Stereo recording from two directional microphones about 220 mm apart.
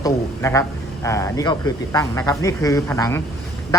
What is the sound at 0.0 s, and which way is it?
A man's voice, 15° left (ahead or behind).